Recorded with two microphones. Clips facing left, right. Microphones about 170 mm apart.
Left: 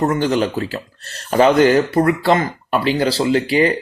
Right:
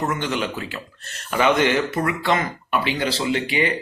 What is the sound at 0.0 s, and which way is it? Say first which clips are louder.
Speech: left 7 dB; 35° left (ahead or behind).